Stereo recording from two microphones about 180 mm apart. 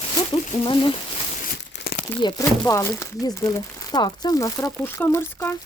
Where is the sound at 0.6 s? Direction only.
30° left (ahead or behind).